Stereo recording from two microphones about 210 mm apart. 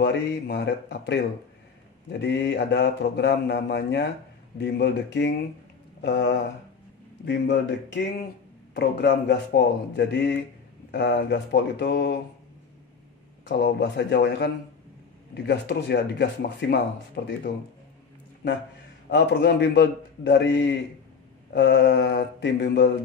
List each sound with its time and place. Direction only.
0.0 s a man's voice: 50° left (ahead or behind)
13.5 s speech: 55° left (ahead or behind)
19.0 s a man's voice: 55° left (ahead or behind)